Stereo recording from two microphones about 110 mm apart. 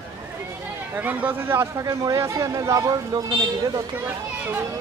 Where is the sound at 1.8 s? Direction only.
30° right (ahead or behind).